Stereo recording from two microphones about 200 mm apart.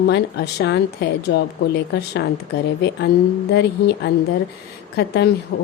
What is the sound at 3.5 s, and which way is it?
A woman's voice, 55° left (ahead or behind).